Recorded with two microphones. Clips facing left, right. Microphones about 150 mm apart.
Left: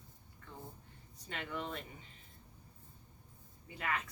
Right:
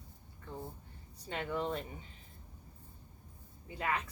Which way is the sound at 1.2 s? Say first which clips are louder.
Right 6 dB; 35° right (ahead or behind).